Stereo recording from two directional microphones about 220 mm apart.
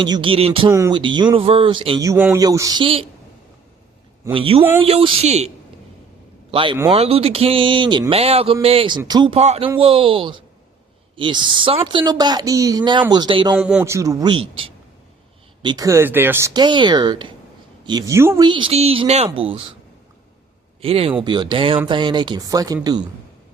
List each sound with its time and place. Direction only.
0.0 s a woman's voice: 20° right (ahead or behind)
0.7 s a woman's voice: 15° right (ahead or behind)
4.3 s a woman's voice: 25° right (ahead or behind)
6.5 s a woman's voice: 25° right (ahead or behind)
13.6 s a man's voice: 5° right (ahead or behind)
15.6 s a woman's voice: 15° right (ahead or behind)
20.8 s a woman's voice: 25° right (ahead or behind)